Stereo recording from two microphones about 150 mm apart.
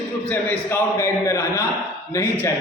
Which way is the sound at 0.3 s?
15° left (ahead or behind).